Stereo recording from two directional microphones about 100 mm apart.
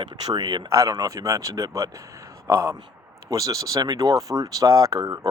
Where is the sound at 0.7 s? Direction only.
35° right (ahead or behind).